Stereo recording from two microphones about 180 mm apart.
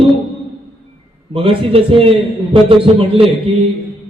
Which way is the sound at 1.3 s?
30° right (ahead or behind).